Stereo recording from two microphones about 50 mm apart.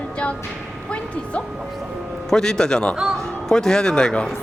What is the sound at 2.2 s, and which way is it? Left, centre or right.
Speech, centre.